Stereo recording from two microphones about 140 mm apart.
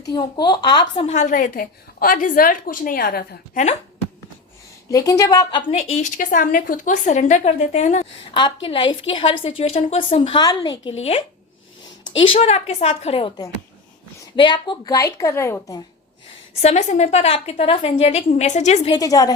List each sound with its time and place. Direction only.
0.1 s a woman's voice: 30° left (ahead or behind)
1.0 s a woman's voice: 55° left (ahead or behind)
4.9 s a woman's voice: 25° left (ahead or behind)
5.7 s a woman's voice: 55° left (ahead or behind)
8.3 s a woman's voice: 35° left (ahead or behind)
16.6 s a woman's voice: 50° left (ahead or behind)
18.9 s a woman's voice: 25° left (ahead or behind)